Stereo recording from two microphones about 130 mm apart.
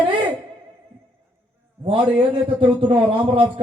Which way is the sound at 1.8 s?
40° right (ahead or behind).